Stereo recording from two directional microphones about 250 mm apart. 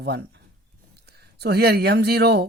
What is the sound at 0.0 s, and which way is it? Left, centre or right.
Speech, right.